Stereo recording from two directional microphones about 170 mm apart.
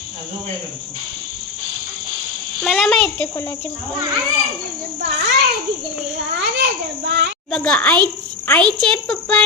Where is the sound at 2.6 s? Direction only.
Centre (ahead or behind).